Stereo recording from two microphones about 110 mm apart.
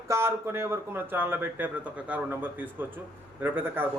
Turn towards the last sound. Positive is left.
turn(degrees=-15)  # may be behind; listen again after turning